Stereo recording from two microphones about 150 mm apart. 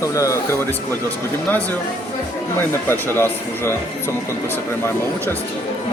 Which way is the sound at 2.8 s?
15° left (ahead or behind).